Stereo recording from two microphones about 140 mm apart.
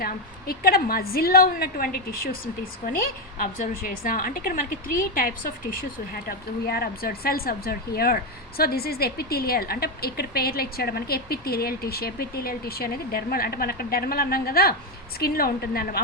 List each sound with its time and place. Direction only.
0.0 s a woman's voice: 90° left